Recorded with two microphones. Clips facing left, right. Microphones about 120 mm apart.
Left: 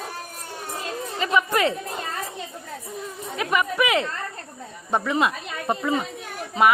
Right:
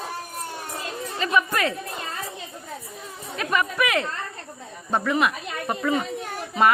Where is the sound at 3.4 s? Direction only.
20° left (ahead or behind).